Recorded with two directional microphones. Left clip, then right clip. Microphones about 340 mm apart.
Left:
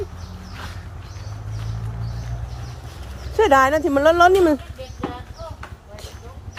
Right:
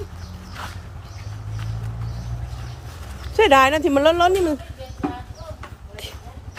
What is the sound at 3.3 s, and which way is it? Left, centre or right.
Speech, centre.